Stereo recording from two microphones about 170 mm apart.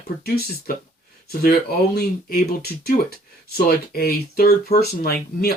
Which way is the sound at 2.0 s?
65° left (ahead or behind).